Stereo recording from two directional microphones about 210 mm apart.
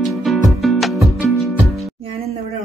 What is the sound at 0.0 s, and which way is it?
Music, centre (ahead or behind).